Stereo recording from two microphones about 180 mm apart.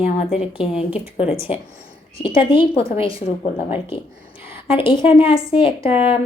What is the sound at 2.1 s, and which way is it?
A woman's voice, 30° left (ahead or behind).